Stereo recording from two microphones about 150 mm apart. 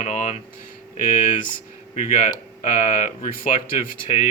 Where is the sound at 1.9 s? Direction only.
60° left (ahead or behind).